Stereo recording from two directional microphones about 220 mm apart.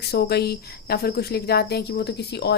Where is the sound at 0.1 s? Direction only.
45° left (ahead or behind).